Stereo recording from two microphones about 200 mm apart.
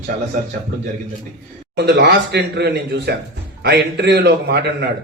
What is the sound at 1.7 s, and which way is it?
A man's voice, 55° right (ahead or behind).